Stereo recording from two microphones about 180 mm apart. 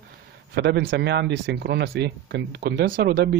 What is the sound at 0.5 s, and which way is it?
Speech, 70° right (ahead or behind).